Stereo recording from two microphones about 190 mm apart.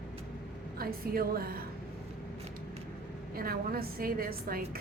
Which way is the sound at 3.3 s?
50° right (ahead or behind).